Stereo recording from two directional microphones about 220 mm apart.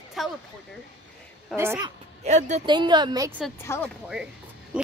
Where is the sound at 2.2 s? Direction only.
30° right (ahead or behind); by 3.4 s 15° right (ahead or behind).